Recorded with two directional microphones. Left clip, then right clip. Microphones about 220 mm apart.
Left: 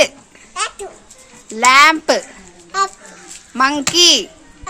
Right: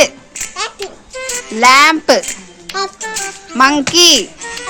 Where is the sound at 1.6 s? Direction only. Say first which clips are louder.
Right 2 dB; centre (ahead or behind).